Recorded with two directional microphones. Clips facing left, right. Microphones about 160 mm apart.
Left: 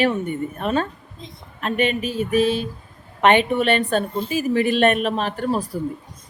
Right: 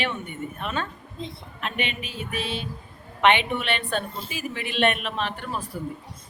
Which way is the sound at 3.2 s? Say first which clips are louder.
Left 5 dB; 40° left (ahead or behind).